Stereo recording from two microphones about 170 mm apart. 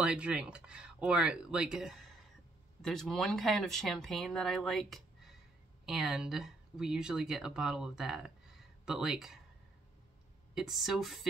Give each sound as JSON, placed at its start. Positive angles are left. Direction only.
{"t": 0.0, "sound": "speech", "side_deg": -5}
{"t": 10.5, "sound": "speech", "side_deg": 0}